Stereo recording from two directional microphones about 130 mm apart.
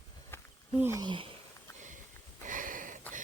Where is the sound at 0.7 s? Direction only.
15° right (ahead or behind).